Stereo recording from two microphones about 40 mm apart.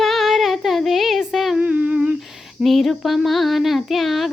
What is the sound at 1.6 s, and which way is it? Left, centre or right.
Humming, right.